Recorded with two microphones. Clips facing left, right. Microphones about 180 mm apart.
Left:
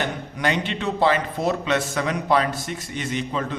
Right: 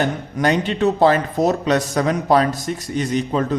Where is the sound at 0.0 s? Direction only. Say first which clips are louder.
Right 6 dB; 45° right (ahead or behind).